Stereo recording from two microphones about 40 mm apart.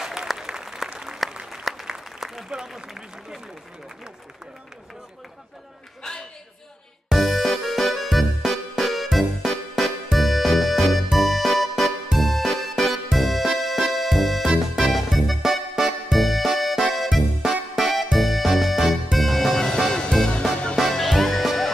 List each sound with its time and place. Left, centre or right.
0.0 s applause: centre
1.6 s applause: centre
2.1 s a sound: centre
2.7 s a man's voice: centre
6.0 s a sound: centre
7.1 s music: centre